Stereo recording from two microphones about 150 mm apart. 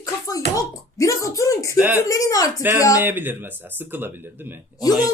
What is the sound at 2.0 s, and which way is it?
Speech, 20° left (ahead or behind).